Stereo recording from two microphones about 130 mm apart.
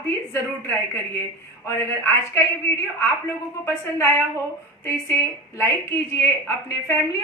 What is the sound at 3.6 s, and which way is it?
A woman's voice, 20° left (ahead or behind).